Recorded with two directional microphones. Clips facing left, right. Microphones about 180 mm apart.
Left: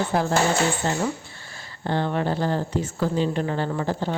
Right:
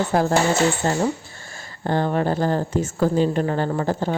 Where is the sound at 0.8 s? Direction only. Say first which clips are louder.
Right 4 dB; 40° right (ahead or behind).